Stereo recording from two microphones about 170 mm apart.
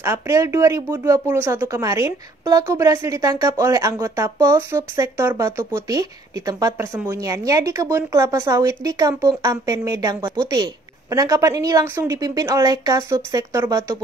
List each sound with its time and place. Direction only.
0.0 s a woman's voice: 15° right (ahead or behind)